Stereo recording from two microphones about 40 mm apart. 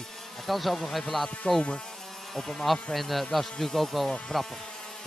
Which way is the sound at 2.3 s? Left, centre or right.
Centre.